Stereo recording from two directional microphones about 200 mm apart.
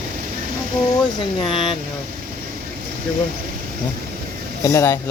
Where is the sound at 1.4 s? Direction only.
25° left (ahead or behind).